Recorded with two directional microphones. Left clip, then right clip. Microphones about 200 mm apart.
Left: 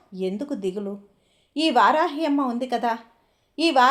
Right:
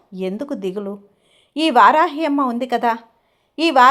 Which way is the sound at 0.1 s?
25° right (ahead or behind).